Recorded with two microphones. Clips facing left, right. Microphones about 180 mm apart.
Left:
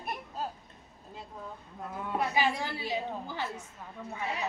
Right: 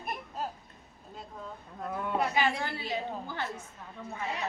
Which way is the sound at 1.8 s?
60° right (ahead or behind).